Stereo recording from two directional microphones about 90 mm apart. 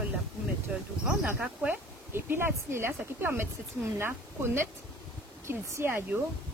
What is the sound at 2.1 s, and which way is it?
A woman's voice, 25° right (ahead or behind).